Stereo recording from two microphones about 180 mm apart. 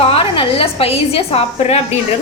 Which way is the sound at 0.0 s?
30° left (ahead or behind).